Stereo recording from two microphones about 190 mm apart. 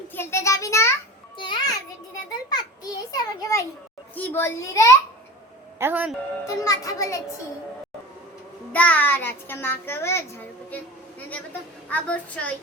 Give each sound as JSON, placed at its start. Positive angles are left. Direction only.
{"t": 0.1, "sound": "a child's voice", "side_deg": 10}
{"t": 5.8, "sound": "speech", "side_deg": -10}
{"t": 6.4, "sound": "a child's voice", "side_deg": 15}
{"t": 8.7, "sound": "a child's voice", "side_deg": 10}
{"t": 11.9, "sound": "a child's voice", "side_deg": 5}